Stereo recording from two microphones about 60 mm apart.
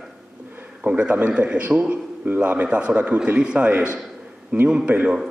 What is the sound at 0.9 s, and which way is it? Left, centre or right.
A man's voice, right.